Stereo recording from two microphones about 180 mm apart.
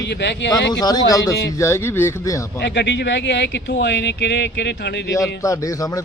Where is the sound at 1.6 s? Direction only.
15° left (ahead or behind).